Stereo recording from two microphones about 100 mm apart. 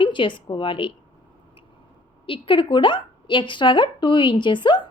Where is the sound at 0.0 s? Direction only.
55° left (ahead or behind).